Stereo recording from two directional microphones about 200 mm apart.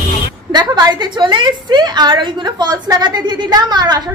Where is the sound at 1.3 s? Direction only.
20° right (ahead or behind).